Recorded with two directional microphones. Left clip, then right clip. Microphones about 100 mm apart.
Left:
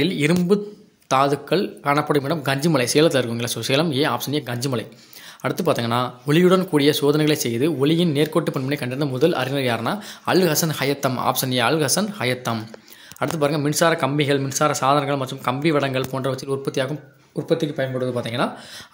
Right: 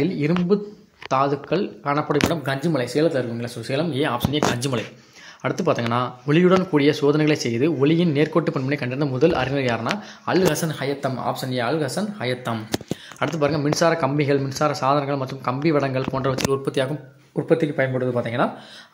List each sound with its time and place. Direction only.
0.0 s speech: 5° left (ahead or behind)
0.5 s speech: 30° left (ahead or behind)
2.5 s speech: 55° left (ahead or behind)
3.9 s speech: 30° left (ahead or behind)
9.8 s speech: 35° left (ahead or behind)
10.8 s speech: 55° left (ahead or behind)
13.2 s speech: 20° left (ahead or behind); by 14.4 s centre (ahead or behind)
14.4 s speech: 15° left (ahead or behind)
15.4 s speech: centre (ahead or behind)
16.1 s speech: 10° left (ahead or behind)
16.6 s speech: centre (ahead or behind)